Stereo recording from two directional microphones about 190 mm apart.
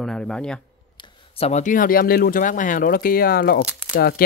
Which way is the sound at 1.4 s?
40° left (ahead or behind).